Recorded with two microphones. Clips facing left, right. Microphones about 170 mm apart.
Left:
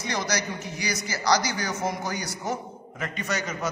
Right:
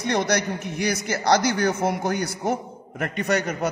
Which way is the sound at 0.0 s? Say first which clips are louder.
Right 6 dB; 60° right (ahead or behind).